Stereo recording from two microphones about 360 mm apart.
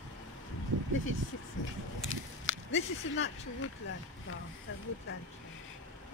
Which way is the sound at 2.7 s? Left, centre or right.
Left.